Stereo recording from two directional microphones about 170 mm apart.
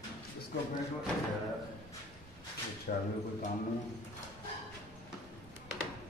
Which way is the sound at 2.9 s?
60° left (ahead or behind).